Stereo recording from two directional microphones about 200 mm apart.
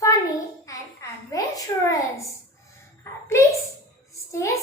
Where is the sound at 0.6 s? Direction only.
15° left (ahead or behind).